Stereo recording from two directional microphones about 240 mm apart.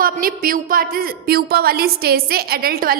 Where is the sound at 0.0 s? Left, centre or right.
Right.